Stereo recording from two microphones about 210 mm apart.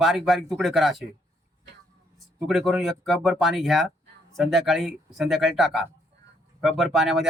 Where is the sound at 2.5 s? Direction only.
Centre (ahead or behind).